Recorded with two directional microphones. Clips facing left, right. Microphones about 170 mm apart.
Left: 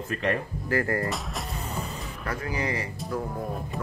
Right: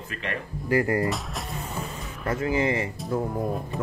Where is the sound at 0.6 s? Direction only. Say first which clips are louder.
Right 4 dB; 20° right (ahead or behind).